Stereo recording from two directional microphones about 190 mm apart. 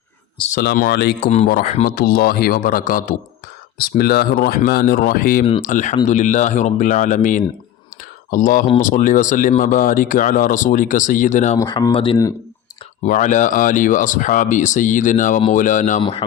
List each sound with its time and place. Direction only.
0.5 s speech: 50° left (ahead or behind)
11.6 s speech: 20° left (ahead or behind)
13.1 s speech: 40° left (ahead or behind)